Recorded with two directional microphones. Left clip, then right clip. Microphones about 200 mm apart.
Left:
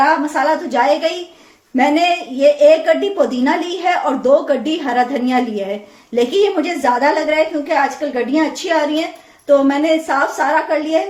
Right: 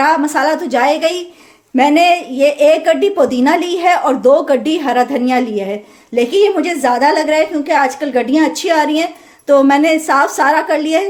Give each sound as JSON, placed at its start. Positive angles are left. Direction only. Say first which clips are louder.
{"t": 0.0, "sound": "a woman's voice", "louder": "right 2 dB", "side_deg": -55}
{"t": 0.8, "sound": "a woman's voice", "louder": "right 2 dB", "side_deg": -40}
{"t": 7.3, "sound": "a woman's voice", "louder": "right 2 dB", "side_deg": -55}